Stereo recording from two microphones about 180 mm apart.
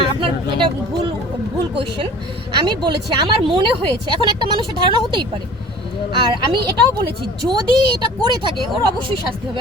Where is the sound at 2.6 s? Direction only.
25° right (ahead or behind).